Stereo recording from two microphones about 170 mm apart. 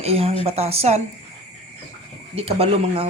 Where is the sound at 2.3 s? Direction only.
35° right (ahead or behind).